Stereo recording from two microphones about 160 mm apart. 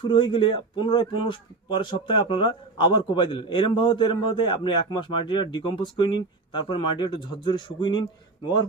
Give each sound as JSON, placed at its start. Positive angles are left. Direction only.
{"t": 0.0, "sound": "a man's voice", "side_deg": 30}